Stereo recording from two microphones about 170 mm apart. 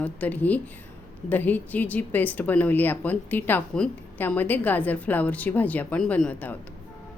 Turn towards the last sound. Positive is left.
turn(degrees=10)  # may be behind; listen again after turning